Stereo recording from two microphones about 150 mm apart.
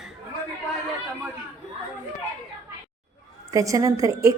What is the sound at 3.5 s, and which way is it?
Speech, 20° right (ahead or behind).